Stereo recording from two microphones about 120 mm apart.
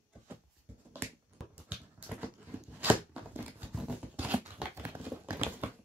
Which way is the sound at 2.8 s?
15° right (ahead or behind).